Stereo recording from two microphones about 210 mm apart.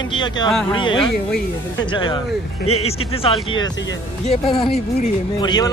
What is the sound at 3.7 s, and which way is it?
Speech, 60° left (ahead or behind).